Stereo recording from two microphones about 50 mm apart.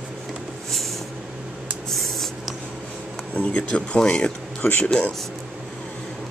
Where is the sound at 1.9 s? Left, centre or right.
Centre.